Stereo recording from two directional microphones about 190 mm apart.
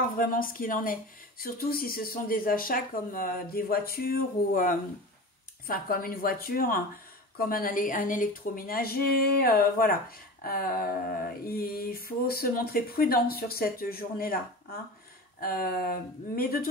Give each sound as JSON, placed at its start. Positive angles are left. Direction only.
{"t": 0.2, "sound": "a woman's voice", "side_deg": 50}